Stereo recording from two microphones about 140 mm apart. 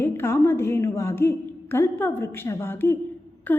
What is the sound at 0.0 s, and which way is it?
A woman's voice, 15° left (ahead or behind).